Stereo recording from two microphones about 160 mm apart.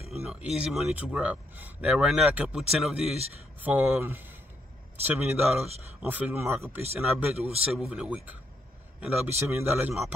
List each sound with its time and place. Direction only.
0.1 s a man's voice: 5° right (ahead or behind)
7.3 s speech: 40° right (ahead or behind)
7.6 s a man's voice: 5° right (ahead or behind)